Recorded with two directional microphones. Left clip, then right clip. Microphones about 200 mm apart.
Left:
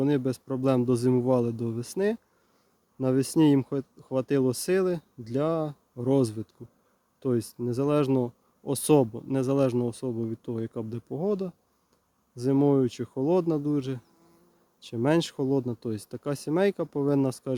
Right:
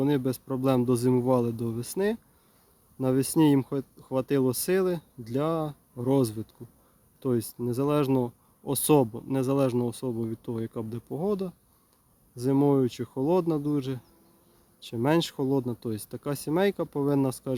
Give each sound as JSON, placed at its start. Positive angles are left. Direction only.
{"t": 0.0, "sound": "speech", "side_deg": 0}